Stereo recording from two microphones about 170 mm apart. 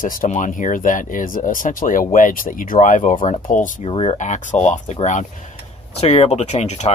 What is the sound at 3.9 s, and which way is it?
Speech, 35° left (ahead or behind).